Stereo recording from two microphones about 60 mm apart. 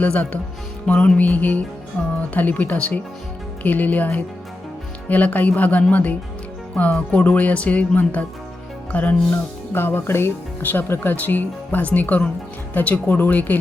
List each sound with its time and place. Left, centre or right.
0.0 s speech: left
9.3 s speech: left